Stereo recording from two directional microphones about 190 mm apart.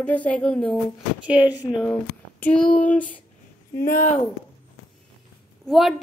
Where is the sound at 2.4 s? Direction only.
5° left (ahead or behind).